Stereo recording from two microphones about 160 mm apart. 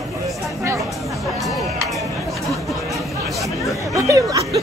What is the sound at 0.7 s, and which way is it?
Music, centre (ahead or behind).